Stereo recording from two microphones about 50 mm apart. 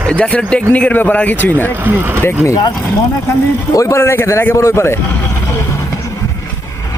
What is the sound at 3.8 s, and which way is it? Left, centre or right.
A man's voice, left.